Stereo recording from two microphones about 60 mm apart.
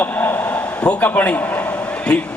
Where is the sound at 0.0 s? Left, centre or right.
Left.